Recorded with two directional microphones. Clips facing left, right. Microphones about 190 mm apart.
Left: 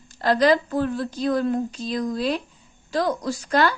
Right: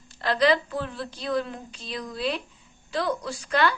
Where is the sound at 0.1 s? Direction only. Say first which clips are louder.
Left 4 dB; 45° left (ahead or behind).